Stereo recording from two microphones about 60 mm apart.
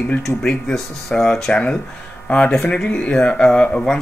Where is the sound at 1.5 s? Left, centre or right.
Centre.